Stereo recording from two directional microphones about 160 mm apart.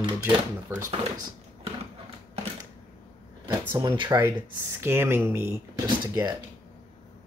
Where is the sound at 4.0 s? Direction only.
20° right (ahead or behind).